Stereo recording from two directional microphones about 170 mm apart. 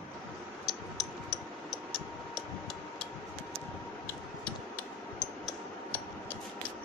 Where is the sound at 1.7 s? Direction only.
Centre (ahead or behind).